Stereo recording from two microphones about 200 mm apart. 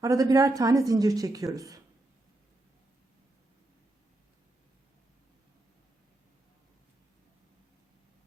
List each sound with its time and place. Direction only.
0.0 s a woman's voice: 15° right (ahead or behind)